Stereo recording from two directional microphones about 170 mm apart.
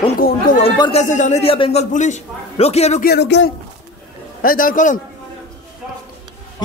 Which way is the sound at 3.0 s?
85° left.